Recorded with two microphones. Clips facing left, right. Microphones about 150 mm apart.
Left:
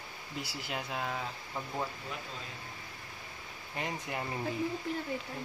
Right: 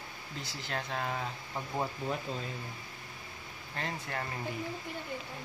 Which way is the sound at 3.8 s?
15° left (ahead or behind).